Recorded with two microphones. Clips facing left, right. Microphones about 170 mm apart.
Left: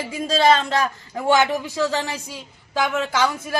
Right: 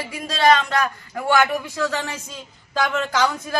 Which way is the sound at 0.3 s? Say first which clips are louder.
Even; 30° left (ahead or behind).